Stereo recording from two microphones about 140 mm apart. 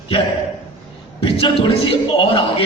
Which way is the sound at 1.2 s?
40° left (ahead or behind).